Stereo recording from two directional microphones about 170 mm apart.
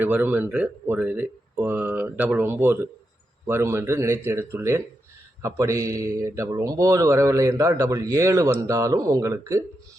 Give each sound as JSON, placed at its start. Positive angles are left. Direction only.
{"t": 0.0, "sound": "a man's voice", "side_deg": -10}